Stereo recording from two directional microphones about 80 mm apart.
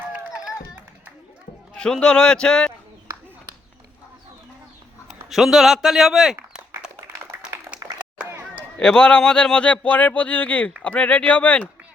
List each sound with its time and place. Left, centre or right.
1.7 s speech: centre
5.0 s speech: centre
6.8 s a sound: centre
8.8 s speech: centre